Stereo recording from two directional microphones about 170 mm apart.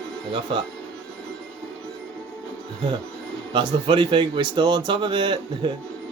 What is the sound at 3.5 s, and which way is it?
Speech, 25° right (ahead or behind).